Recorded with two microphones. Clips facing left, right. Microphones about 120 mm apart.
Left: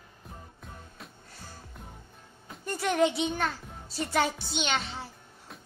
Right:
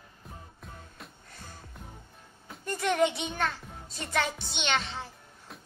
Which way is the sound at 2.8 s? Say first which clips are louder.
Left 1 dB; 5° left (ahead or behind).